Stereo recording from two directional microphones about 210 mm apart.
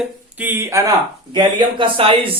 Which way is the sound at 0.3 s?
10° right (ahead or behind).